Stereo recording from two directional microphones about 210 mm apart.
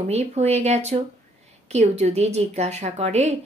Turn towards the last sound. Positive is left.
turn(degrees=-30)  # may be behind; listen again after turning